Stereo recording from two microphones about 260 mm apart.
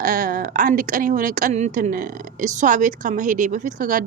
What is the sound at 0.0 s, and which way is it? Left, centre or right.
A woman's voice, right.